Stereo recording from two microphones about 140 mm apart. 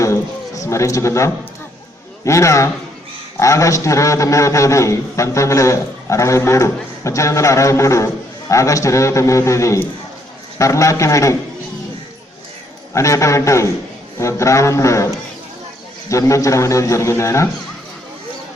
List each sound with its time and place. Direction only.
0.0 s a sound: 25° left (ahead or behind)
2.2 s a man's voice: 20° left (ahead or behind)
12.9 s a man's voice: 20° left (ahead or behind)